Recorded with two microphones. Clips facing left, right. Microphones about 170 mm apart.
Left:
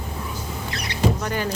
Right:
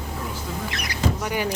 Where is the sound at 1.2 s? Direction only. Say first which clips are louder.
Even; 15° right (ahead or behind).